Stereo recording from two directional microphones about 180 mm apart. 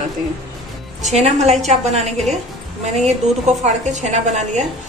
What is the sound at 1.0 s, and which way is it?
A woman's voice, 40° right (ahead or behind).